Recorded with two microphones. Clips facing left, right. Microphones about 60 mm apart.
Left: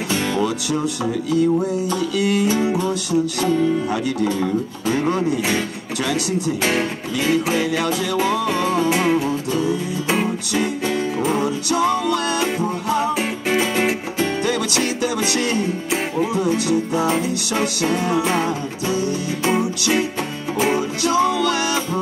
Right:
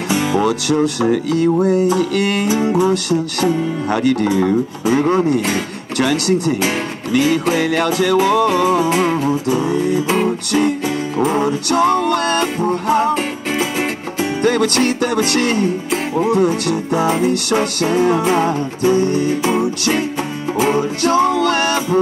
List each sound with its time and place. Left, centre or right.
0.1 s music: centre
0.4 s music: right
5.9 s music: right
8.6 s music: centre
8.9 s music: centre
9.6 s music: right
10.0 s music: centre
10.9 s music: centre
11.4 s music: right
13.1 s music: centre
14.4 s music: right
18.4 s music: right
19.4 s music: centre
21.0 s music: right